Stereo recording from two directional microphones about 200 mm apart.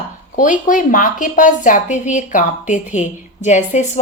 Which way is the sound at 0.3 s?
40° left (ahead or behind).